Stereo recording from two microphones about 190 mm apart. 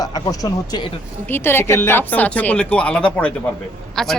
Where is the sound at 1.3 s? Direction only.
10° left (ahead or behind).